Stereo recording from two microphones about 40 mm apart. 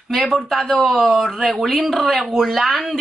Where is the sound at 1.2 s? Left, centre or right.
Centre.